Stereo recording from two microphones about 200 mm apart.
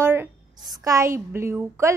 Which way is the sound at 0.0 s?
10° right (ahead or behind).